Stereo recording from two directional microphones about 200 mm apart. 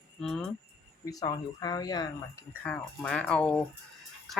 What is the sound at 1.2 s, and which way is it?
Speech, 20° left (ahead or behind).